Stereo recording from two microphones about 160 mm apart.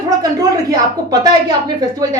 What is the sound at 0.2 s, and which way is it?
A woman's voice, 25° right (ahead or behind).